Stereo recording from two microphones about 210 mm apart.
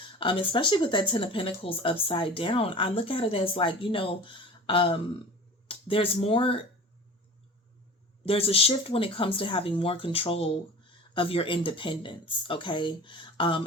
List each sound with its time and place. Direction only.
0.2 s speech: 25° left (ahead or behind)
8.2 s speech: 25° left (ahead or behind)